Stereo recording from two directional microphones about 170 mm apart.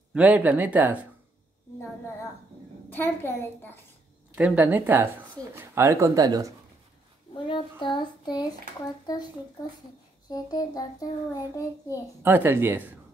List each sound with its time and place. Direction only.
0.1 s speech: 5° right (ahead or behind)
2.9 s a child's voice: 10° left (ahead or behind)
4.4 s speech: 10° right (ahead or behind)
7.4 s a child's voice: 30° left (ahead or behind)
10.3 s a child's voice: 20° left (ahead or behind)
12.2 s speech: 10° right (ahead or behind)